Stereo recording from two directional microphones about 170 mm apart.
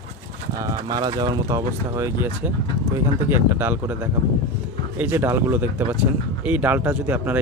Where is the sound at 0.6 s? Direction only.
20° right (ahead or behind).